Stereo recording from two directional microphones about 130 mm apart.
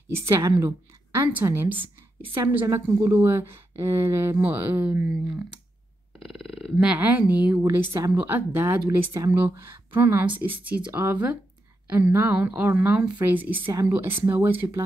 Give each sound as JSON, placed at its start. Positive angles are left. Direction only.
{"t": 0.1, "sound": "speech", "side_deg": -20}
{"t": 6.2, "sound": "a woman's voice", "side_deg": 0}
{"t": 7.5, "sound": "a woman's voice", "side_deg": -25}
{"t": 8.8, "sound": "a woman's voice", "side_deg": -30}